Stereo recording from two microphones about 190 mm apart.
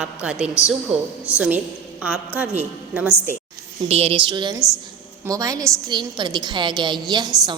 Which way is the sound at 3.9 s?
30° right (ahead or behind).